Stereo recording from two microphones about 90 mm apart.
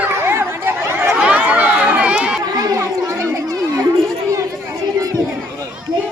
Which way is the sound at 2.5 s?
45° right (ahead or behind).